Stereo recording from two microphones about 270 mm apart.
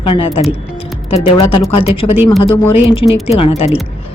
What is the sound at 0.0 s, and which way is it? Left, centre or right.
Speech, centre.